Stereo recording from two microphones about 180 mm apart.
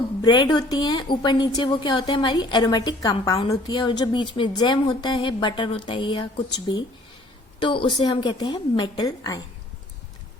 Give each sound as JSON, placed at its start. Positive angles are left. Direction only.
{"t": 0.2, "sound": "a woman's voice", "side_deg": 25}